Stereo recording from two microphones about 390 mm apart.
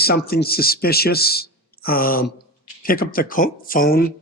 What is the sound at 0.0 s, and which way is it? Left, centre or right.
Speech, left.